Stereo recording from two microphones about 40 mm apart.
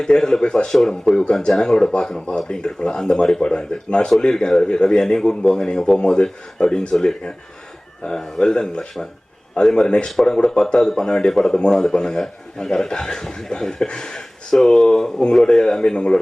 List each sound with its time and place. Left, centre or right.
0.0 s speech: centre